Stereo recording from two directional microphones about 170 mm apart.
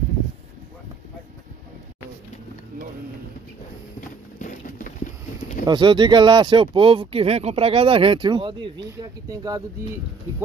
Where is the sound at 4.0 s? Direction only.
50° left (ahead or behind).